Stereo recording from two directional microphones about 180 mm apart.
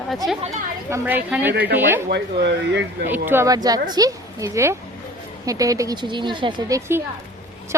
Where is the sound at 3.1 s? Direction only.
10° right (ahead or behind).